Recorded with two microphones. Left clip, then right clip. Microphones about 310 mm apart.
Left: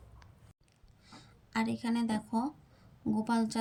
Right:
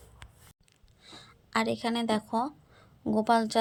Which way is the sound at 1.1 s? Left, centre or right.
Centre.